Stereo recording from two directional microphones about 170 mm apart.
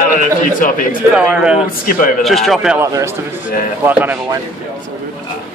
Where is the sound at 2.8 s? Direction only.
15° right (ahead or behind).